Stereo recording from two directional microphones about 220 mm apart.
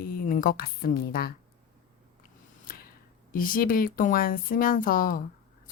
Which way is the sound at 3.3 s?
40° left (ahead or behind).